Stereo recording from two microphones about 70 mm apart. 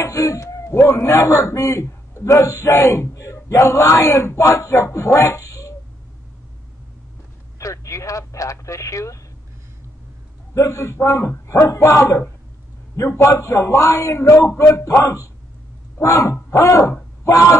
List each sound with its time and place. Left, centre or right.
0.0 s a man's voice: left
7.5 s speech: left
10.5 s a man's voice: left